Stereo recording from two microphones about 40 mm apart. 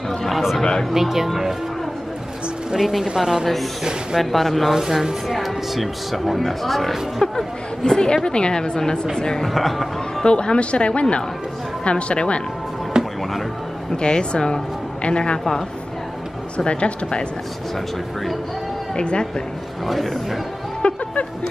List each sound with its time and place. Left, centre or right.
0.8 s speech: centre
2.7 s speech: centre
4.2 s speech: centre
4.6 s speech: centre
7.8 s a man's voice: centre
9.5 s speech: centre
10.2 s speech: left
12.9 s music: right
13.9 s speech: left
16.5 s speech: left
18.9 s speech: left
19.9 s speech: centre
20.8 s a sound: left